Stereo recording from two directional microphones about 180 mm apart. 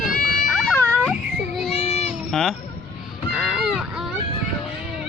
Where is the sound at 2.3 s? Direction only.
Centre (ahead or behind).